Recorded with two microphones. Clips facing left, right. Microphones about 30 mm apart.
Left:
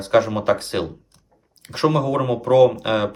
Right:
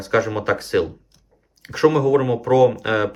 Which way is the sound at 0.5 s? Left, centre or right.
Left.